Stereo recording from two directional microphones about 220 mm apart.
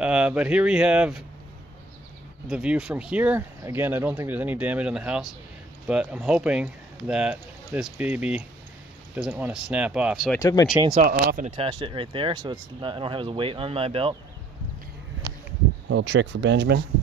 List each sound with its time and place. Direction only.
0.0 s speech: 5° right (ahead or behind)
2.4 s speech: 5° right (ahead or behind)
10.4 s speech: 15° left (ahead or behind)
11.0 s speech: 40° right (ahead or behind)
15.9 s speech: 55° right (ahead or behind)